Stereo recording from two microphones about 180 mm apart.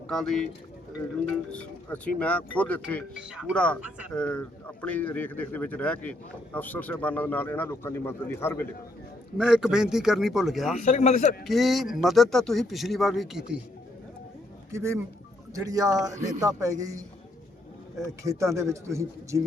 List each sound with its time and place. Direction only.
0.1 s a man's voice: centre (ahead or behind)
1.5 s speech: 5° left (ahead or behind)
3.2 s a man's voice: 5° right (ahead or behind)
3.8 s speech: 5° right (ahead or behind)
4.1 s speech: 5° left (ahead or behind)
9.4 s a man's voice: 5° right (ahead or behind)
10.8 s a man's voice: 45° left (ahead or behind)
11.4 s a man's voice: centre (ahead or behind)
14.7 s speech: 15° right (ahead or behind)
18.2 s speech: 15° right (ahead or behind)